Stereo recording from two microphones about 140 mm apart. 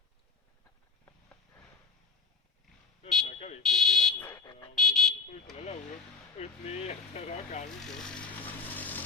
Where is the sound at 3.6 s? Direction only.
Centre (ahead or behind).